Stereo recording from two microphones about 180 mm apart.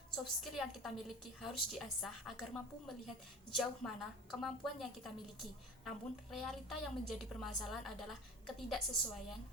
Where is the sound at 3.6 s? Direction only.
Centre (ahead or behind).